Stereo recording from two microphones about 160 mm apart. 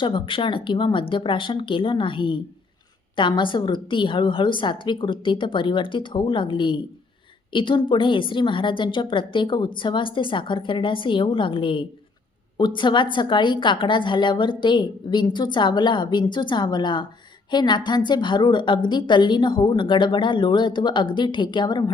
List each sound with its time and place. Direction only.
0.0 s a woman's voice: 30° left (ahead or behind)